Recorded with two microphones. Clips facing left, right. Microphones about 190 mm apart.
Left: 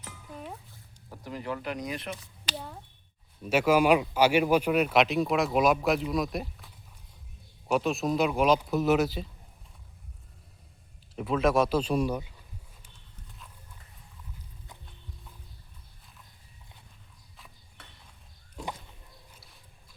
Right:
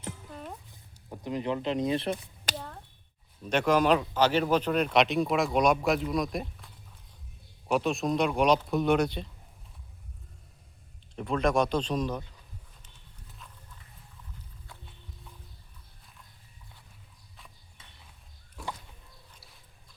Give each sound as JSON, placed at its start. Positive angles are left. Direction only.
{"t": 0.7, "sound": "speech", "side_deg": -20}
{"t": 2.6, "sound": "a sound", "side_deg": 5}
{"t": 3.4, "sound": "speech", "side_deg": 5}
{"t": 7.7, "sound": "speech", "side_deg": 0}
{"t": 11.1, "sound": "speech", "side_deg": 5}
{"t": 17.8, "sound": "a sound", "side_deg": 65}